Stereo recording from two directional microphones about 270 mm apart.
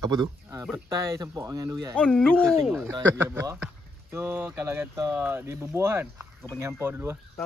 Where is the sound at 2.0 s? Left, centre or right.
Centre.